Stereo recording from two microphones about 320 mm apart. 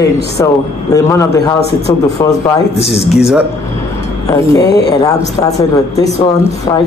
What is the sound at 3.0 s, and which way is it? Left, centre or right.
Speech, centre.